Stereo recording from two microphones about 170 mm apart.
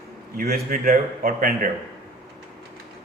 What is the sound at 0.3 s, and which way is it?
A man's voice, 60° right (ahead or behind).